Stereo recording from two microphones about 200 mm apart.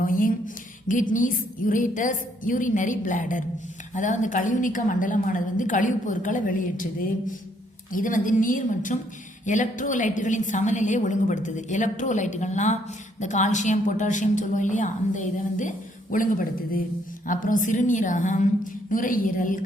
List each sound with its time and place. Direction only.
0.0 s a woman's voice: 45° left (ahead or behind)
7.9 s a woman's voice: 40° left (ahead or behind)